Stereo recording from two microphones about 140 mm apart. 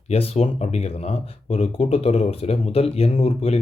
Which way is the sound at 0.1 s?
45° left (ahead or behind).